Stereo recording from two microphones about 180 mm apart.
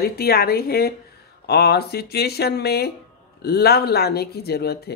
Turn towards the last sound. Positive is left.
turn(degrees=60)  # may be behind; listen again after turning